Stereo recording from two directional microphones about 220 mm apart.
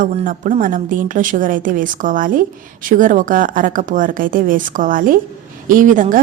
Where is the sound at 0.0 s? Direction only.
40° right (ahead or behind).